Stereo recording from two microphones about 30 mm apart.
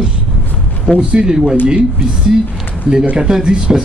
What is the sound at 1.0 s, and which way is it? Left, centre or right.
Speech, right.